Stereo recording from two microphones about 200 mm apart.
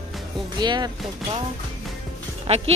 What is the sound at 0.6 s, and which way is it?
Speech, 20° right (ahead or behind).